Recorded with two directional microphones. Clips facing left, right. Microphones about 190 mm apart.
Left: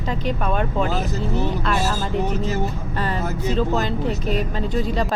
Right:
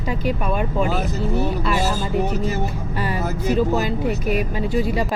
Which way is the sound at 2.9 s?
10° right (ahead or behind).